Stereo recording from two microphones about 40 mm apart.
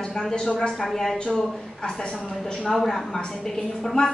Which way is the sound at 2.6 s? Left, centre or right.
Centre.